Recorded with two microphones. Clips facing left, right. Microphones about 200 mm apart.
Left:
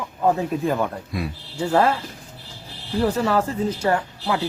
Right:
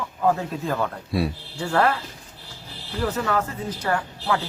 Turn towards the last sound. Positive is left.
turn(degrees=20)  # may be behind; listen again after turning